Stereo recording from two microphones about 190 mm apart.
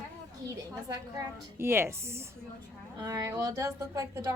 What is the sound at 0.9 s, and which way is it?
A woman's voice, 15° right (ahead or behind).